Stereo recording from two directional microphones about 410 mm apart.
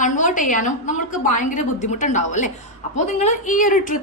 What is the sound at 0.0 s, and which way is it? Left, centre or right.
A woman's voice, centre.